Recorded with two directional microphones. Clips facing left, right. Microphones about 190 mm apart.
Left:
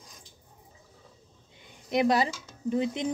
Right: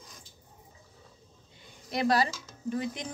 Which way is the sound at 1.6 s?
20° left (ahead or behind).